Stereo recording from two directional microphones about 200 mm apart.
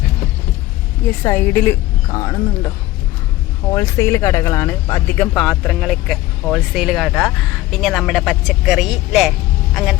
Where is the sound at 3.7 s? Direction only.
15° left (ahead or behind).